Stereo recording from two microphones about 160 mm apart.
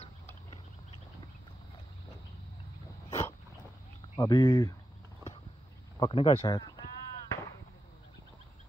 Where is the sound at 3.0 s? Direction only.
20° left (ahead or behind).